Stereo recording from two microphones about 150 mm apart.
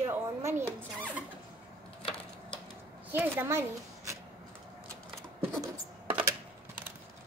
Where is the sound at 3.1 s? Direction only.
15° right (ahead or behind).